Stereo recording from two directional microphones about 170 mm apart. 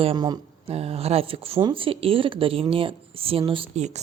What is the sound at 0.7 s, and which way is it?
A woman's voice, 35° right (ahead or behind).